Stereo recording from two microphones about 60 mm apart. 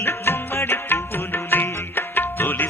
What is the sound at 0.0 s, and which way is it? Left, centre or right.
Music, left.